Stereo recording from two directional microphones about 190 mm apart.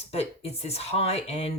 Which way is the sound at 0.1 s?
35° left (ahead or behind).